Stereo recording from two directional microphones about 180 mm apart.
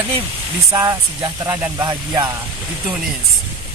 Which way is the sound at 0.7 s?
20° right (ahead or behind).